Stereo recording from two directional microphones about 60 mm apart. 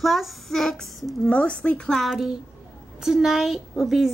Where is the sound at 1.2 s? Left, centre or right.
Centre.